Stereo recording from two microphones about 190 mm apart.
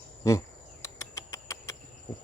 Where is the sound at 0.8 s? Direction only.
15° left (ahead or behind).